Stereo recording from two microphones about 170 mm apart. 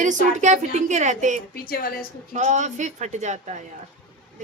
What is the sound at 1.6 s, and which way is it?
Speech, 60° left (ahead or behind).